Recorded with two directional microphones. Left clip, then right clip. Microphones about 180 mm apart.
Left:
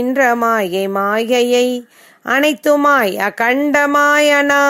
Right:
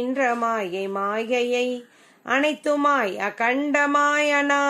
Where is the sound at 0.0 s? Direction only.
45° left (ahead or behind).